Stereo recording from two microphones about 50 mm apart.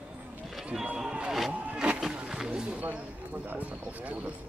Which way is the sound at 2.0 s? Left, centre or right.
Centre.